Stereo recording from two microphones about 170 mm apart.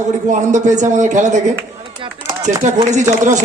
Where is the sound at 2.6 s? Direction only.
45° right (ahead or behind).